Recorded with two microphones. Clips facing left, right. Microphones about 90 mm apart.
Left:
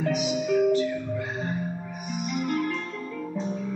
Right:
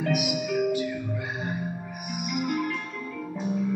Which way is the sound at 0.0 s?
10° right (ahead or behind).